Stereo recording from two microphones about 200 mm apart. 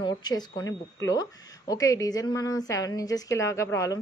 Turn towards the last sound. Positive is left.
turn(degrees=15)  # may be behind; listen again after turning